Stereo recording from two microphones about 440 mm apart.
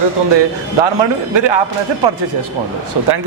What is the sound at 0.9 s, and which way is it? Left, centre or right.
Speech, right.